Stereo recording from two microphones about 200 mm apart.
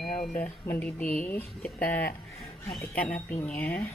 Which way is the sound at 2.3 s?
30° left (ahead or behind).